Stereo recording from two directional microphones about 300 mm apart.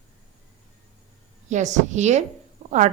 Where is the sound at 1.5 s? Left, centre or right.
Right.